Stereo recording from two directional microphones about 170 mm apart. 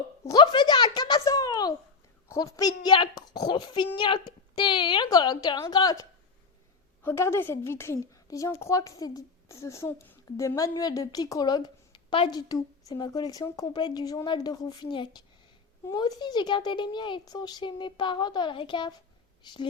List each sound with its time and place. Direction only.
0.3 s a woman's voice: 25° left (ahead or behind)